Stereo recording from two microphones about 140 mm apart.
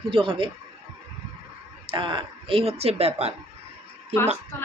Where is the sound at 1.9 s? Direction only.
35° right (ahead or behind).